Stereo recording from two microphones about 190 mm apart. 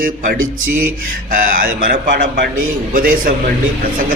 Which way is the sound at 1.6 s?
50° right (ahead or behind).